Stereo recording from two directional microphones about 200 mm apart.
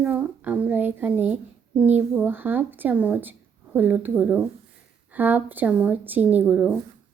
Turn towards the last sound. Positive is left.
turn(degrees=-5)  # may be behind; listen again after turning